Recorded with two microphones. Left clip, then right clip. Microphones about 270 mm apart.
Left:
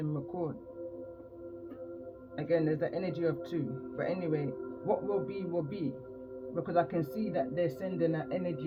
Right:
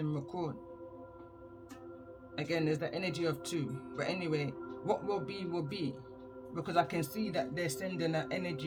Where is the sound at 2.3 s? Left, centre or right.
Centre.